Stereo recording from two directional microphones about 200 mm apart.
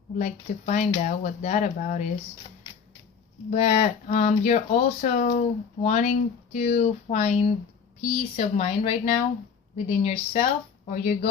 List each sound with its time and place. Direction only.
0.2 s speech: 35° left (ahead or behind)
3.5 s speech: 35° left (ahead or behind)